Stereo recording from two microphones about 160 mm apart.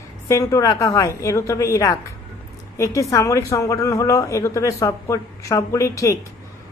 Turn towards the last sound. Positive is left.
turn(degrees=20)  # may be behind; listen again after turning